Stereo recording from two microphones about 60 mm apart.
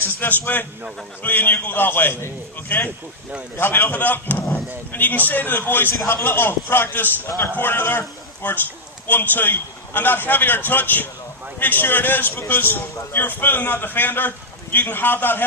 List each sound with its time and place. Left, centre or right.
0.2 s a man's voice: left
7.3 s a man's voice: left
7.5 s a man's voice: left